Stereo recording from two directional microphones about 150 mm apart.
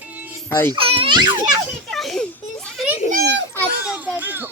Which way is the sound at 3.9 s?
10° right (ahead or behind).